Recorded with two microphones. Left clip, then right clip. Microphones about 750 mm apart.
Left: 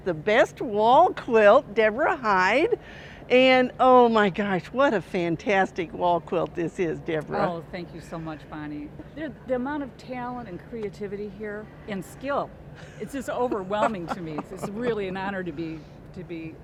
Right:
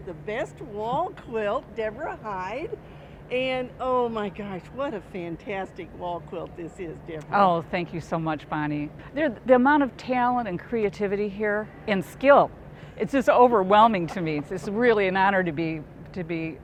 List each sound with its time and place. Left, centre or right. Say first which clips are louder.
0.1 s speech: left 10 dB; left
7.3 s speech: right 12 dB; right